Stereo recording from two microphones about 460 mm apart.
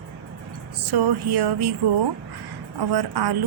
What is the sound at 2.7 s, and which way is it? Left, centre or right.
Speech, right.